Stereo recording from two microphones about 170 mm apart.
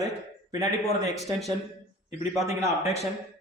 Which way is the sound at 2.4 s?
20° right (ahead or behind).